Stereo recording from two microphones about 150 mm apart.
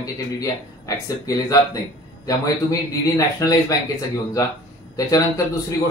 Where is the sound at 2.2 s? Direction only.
20° left (ahead or behind).